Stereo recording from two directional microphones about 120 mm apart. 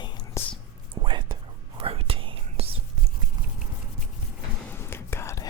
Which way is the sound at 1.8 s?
50° right (ahead or behind).